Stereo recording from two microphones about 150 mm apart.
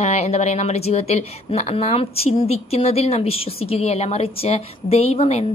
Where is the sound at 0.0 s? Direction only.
45° left (ahead or behind).